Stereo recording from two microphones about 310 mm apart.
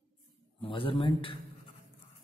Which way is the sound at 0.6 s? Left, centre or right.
Centre.